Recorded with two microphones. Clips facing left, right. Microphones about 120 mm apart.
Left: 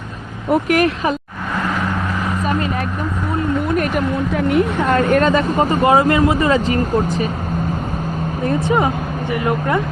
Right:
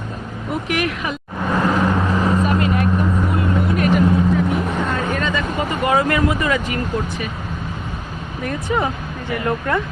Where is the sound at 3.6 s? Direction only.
45° left (ahead or behind).